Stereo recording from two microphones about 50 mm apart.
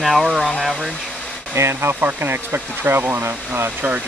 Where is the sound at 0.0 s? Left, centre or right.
Centre.